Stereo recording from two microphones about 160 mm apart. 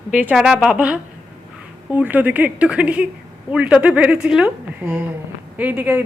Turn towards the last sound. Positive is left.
turn(degrees=-10)  # may be behind; listen again after turning